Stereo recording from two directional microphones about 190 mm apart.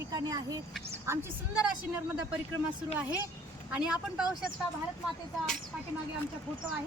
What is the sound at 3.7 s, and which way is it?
Speech, 5° right (ahead or behind).